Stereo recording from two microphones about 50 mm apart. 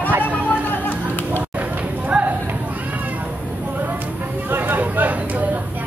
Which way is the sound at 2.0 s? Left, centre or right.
Right.